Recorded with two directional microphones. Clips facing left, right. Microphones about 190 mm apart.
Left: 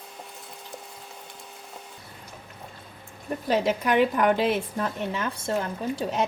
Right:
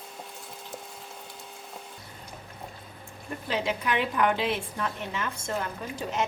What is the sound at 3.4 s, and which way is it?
A woman's voice, 45° left (ahead or behind).